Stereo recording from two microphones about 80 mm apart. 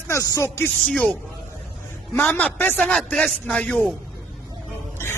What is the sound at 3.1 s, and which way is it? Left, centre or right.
Speech, centre.